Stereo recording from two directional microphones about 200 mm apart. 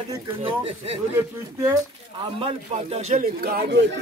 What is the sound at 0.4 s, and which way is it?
Music, 30° right (ahead or behind).